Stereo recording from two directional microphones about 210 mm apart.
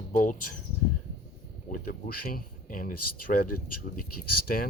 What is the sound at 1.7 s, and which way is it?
Speech, 45° left (ahead or behind).